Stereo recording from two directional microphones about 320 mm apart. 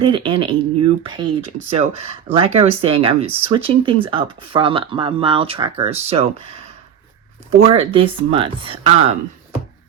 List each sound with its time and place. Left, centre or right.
0.0 s speech: centre
7.5 s speech: centre